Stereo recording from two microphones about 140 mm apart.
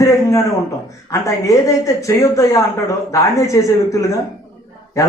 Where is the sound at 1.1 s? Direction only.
20° left (ahead or behind).